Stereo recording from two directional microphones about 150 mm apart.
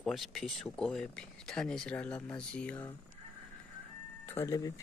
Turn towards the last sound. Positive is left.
turn(degrees=25)  # may be behind; listen again after turning